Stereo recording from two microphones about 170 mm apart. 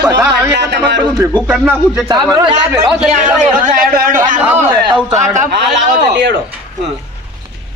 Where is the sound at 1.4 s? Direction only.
5° right (ahead or behind).